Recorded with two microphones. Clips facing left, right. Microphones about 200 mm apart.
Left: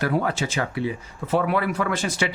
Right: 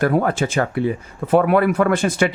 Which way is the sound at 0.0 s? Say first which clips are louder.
Right 6 dB; 50° right (ahead or behind).